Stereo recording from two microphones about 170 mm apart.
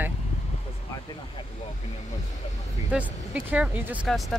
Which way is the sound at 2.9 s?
10° right (ahead or behind).